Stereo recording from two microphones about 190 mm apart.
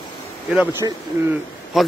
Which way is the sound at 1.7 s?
Centre (ahead or behind).